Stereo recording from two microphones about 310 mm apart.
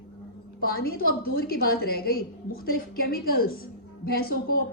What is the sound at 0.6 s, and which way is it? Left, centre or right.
A woman's voice, left.